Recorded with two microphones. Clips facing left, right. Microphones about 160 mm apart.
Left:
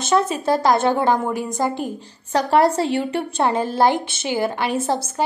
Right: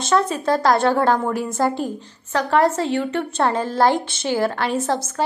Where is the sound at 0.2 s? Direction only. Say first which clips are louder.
Even; 25° left (ahead or behind).